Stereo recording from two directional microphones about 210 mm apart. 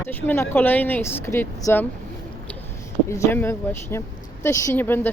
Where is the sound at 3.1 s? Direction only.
15° left (ahead or behind).